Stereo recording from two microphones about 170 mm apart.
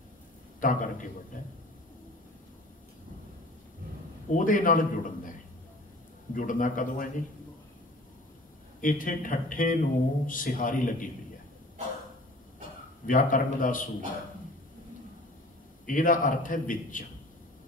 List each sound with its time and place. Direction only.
0.6 s a man's voice: 50° left (ahead or behind)
4.4 s a man's voice: 50° left (ahead or behind)
6.3 s a man's voice: 50° left (ahead or behind)
8.8 s a man's voice: 50° left (ahead or behind)
13.0 s a man's voice: 50° left (ahead or behind)
15.9 s a man's voice: 50° left (ahead or behind)